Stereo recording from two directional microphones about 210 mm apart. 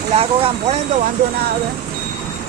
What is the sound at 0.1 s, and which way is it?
Speech, 30° right (ahead or behind).